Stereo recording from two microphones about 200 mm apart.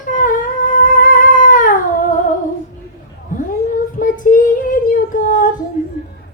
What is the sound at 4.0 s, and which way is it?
Child singing, 40° left (ahead or behind).